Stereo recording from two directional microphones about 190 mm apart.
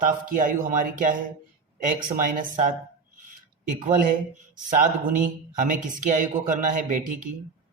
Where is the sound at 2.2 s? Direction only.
45° right (ahead or behind).